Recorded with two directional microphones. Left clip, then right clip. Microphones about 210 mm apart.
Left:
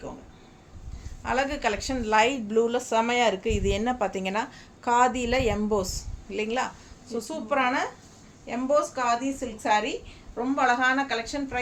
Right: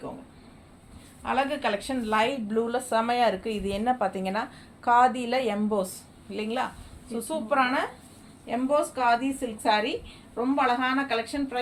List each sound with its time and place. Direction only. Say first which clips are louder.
1.2 s a woman's voice: even; 15° left (ahead or behind)